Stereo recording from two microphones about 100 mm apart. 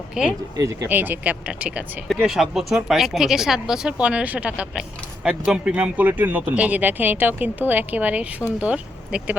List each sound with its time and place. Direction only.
0.2 s speech: 10° right (ahead or behind)
0.5 s speech: 35° right (ahead or behind)
0.9 s speech: 20° right (ahead or behind)
2.0 s speech: centre (ahead or behind)